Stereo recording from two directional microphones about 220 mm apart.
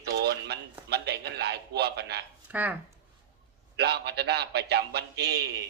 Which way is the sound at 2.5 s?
5° right (ahead or behind).